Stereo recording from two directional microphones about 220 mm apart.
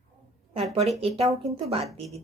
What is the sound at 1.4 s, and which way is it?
Speech, 25° right (ahead or behind).